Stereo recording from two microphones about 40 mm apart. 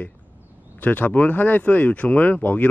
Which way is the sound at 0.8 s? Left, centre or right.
Left.